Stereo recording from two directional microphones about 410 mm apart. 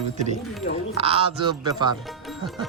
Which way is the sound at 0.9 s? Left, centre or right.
Centre.